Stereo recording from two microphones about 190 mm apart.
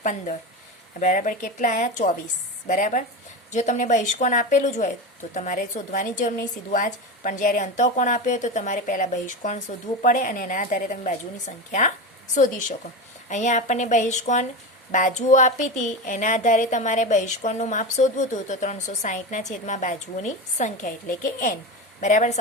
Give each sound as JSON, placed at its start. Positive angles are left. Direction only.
{"t": 0.0, "sound": "a woman's voice", "side_deg": 40}
{"t": 22.0, "sound": "speech", "side_deg": 40}